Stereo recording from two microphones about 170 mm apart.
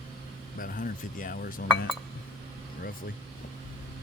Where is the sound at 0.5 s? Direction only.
55° left (ahead or behind).